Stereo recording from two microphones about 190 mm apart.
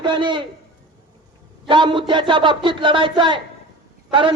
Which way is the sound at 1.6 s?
25° right (ahead or behind).